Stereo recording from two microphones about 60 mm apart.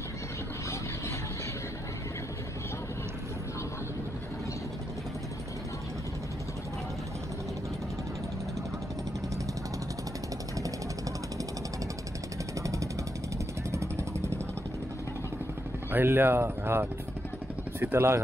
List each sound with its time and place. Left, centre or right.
13.7 s vehicle: right
15.9 s speech: right